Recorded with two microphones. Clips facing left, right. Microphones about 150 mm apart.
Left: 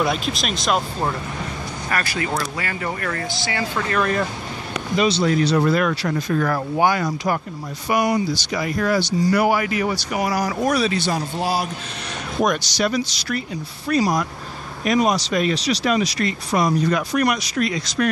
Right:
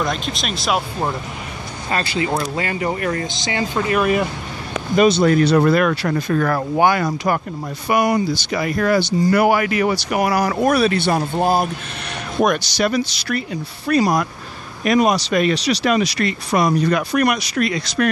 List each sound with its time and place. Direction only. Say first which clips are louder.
0.0 s speech: left 1 dB; 5° left (ahead or behind)
1.9 s speech: right 4 dB; 25° right (ahead or behind)
4.9 s speech: right 5 dB; 55° right (ahead or behind)
12.4 s speech: right 2 dB; 60° right (ahead or behind)